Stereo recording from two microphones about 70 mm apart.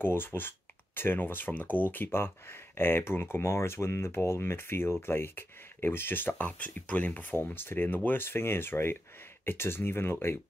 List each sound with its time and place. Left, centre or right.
0.0 s speech: left